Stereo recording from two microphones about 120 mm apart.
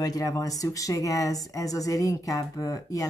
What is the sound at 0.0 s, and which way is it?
Speech, 30° left (ahead or behind).